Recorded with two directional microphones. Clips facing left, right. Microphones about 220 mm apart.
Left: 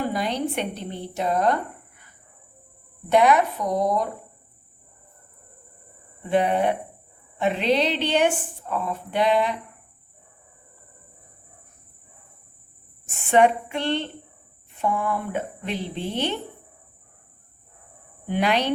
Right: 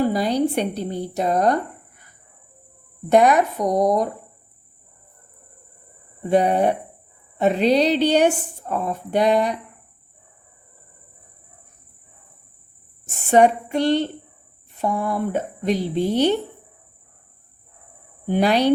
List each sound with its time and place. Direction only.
0.0 s a woman's voice: 35° right (ahead or behind)
3.1 s speech: 45° right (ahead or behind)
6.2 s a woman's voice: 40° right (ahead or behind)
13.1 s a woman's voice: 40° right (ahead or behind)
18.3 s a woman's voice: 35° right (ahead or behind)